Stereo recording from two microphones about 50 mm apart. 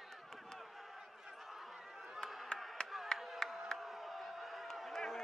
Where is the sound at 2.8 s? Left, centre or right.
Centre.